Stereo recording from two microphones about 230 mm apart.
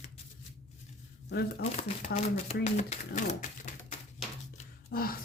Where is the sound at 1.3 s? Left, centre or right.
Left.